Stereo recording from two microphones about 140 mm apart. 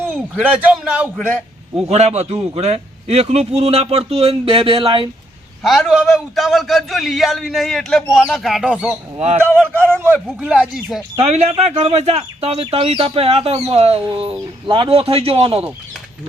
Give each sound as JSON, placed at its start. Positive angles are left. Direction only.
{"t": 0.0, "sound": "a man's voice", "side_deg": -10}
{"t": 1.7, "sound": "a man's voice", "side_deg": -50}
{"t": 5.6, "sound": "a man's voice", "side_deg": 0}
{"t": 9.1, "sound": "a man's voice", "side_deg": -45}
{"t": 10.4, "sound": "speech", "side_deg": -5}
{"t": 11.2, "sound": "a man's voice", "side_deg": -45}